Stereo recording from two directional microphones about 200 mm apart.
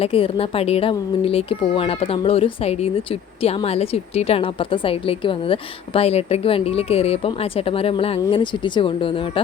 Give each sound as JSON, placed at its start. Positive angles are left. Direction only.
{"t": 0.0, "sound": "a woman's voice", "side_deg": 30}